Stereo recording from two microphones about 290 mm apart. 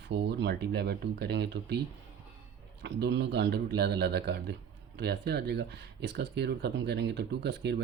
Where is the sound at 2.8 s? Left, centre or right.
Right.